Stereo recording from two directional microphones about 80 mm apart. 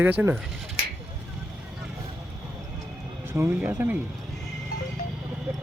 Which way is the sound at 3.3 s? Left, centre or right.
Right.